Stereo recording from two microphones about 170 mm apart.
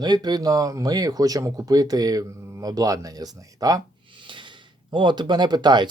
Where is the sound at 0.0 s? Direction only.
25° right (ahead or behind).